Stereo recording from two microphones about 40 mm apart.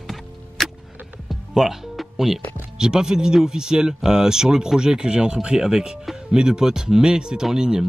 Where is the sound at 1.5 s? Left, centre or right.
Centre.